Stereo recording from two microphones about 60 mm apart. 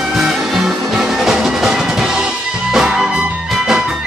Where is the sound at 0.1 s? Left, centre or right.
Centre.